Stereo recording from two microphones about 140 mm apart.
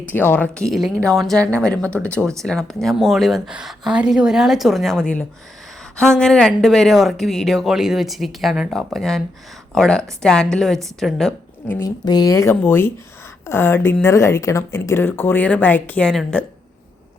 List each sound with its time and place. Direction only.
0.1 s speech: 15° left (ahead or behind)
12.0 s speech: 30° left (ahead or behind); by 16.4 s 5° left (ahead or behind)